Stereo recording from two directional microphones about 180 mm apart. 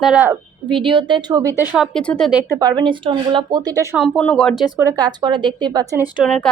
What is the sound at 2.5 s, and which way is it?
Speech, 20° right (ahead or behind).